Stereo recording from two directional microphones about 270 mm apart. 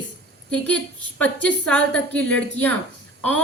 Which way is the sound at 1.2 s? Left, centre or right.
Centre.